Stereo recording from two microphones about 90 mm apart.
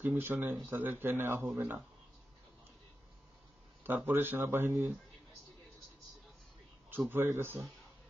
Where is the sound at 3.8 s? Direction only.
20° right (ahead or behind).